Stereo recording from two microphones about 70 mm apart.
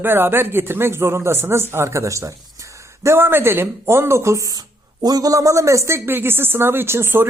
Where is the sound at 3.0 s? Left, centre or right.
Right.